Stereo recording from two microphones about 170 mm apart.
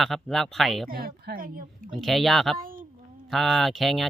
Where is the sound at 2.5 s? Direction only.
55° right (ahead or behind).